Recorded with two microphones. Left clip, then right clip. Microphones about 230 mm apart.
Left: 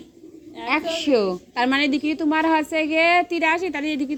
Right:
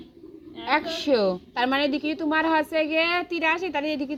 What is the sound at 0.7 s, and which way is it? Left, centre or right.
A woman's voice, centre.